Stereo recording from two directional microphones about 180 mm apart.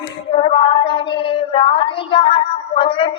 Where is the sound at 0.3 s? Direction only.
30° left (ahead or behind).